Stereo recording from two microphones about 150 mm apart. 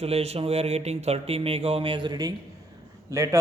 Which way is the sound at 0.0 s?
40° right (ahead or behind).